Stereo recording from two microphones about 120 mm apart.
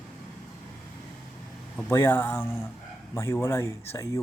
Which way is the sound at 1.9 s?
20° left (ahead or behind).